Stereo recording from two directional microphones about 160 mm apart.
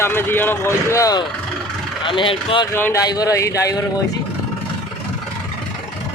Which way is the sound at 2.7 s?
15° left (ahead or behind).